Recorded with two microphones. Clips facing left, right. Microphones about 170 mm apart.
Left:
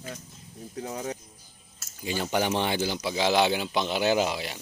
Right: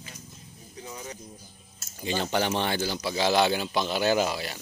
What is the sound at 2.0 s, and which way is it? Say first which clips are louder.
Speech: even; 10° left (ahead or behind).